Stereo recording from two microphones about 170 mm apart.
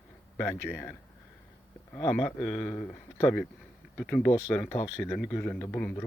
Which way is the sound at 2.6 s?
10° left (ahead or behind).